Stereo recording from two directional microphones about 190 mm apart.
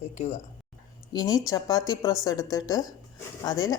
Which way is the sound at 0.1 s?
35° left (ahead or behind).